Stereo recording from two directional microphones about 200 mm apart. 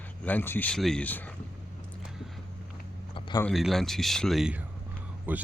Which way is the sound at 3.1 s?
20° left (ahead or behind).